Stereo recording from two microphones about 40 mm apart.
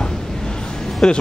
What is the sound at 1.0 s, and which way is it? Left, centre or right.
Speech, centre.